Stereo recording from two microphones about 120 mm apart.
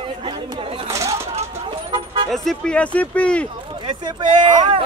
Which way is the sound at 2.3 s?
5° left (ahead or behind).